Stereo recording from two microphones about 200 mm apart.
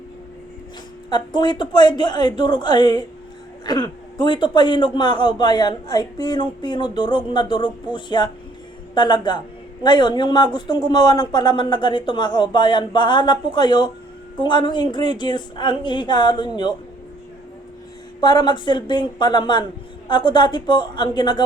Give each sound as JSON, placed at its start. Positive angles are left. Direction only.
{"t": 1.1, "sound": "a man's voice", "side_deg": 20}
{"t": 18.2, "sound": "a man's voice", "side_deg": 20}